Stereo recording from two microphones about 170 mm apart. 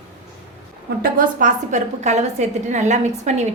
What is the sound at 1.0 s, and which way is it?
A woman's voice, 55° right (ahead or behind).